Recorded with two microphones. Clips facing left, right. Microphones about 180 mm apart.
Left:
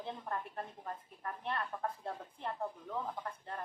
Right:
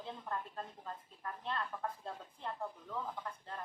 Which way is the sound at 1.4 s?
20° left (ahead or behind).